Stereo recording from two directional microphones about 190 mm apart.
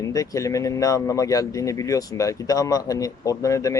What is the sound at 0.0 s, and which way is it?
Speech, 20° left (ahead or behind).